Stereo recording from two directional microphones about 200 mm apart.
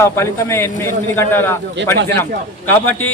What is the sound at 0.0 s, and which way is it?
A man's voice, 15° left (ahead or behind).